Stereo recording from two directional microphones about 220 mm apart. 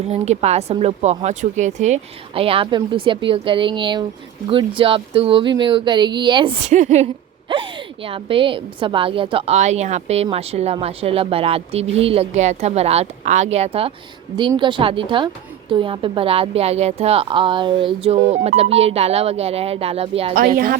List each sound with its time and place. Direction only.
0.1 s speech: 30° right (ahead or behind)